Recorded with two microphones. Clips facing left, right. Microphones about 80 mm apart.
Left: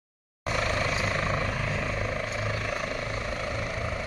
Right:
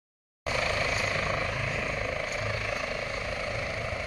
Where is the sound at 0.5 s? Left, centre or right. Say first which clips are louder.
Left 1 dB; left.